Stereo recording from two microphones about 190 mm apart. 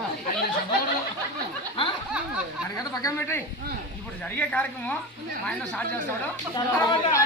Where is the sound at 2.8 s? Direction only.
15° left (ahead or behind).